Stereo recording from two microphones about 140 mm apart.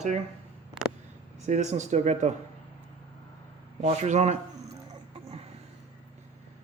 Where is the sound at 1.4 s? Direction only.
55° right (ahead or behind).